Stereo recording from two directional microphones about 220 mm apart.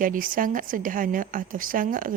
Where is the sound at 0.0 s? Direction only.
40° right (ahead or behind).